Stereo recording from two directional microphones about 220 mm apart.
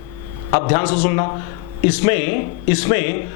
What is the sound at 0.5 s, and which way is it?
Speech, 25° left (ahead or behind).